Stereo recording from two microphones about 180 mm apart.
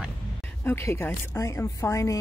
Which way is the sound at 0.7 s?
15° left (ahead or behind).